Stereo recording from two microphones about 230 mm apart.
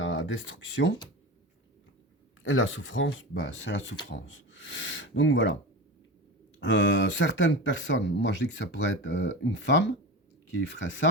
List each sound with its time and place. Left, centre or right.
0.0 s speech: left
2.4 s speech: left
6.6 s speech: left